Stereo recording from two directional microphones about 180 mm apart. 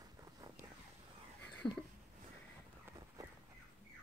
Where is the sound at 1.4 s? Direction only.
5° left (ahead or behind).